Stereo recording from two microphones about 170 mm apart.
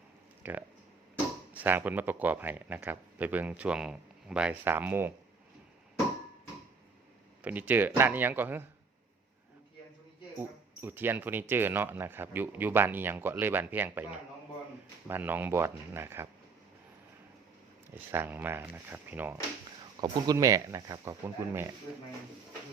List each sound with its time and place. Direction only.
0.4 s speech: 10° right (ahead or behind)
7.4 s speech: 10° right (ahead or behind)
10.8 s speech: 10° right (ahead or behind)
17.9 s speech: 10° right (ahead or behind)